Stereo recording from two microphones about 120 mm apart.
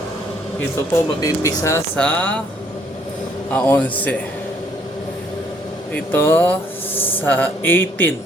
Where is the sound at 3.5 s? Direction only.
10° left (ahead or behind).